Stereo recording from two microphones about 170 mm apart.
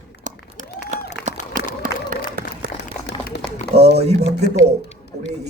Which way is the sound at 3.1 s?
90° left.